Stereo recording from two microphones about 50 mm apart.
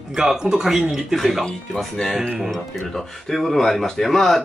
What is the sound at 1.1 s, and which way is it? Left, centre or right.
Speech, centre.